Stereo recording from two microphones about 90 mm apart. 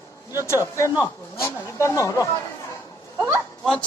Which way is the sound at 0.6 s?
30° left (ahead or behind).